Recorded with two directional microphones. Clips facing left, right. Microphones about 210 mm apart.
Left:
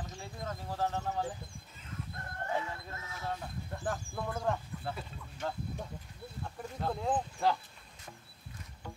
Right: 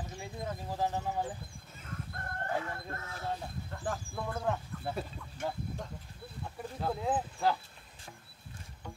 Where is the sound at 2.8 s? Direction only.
55° right (ahead or behind).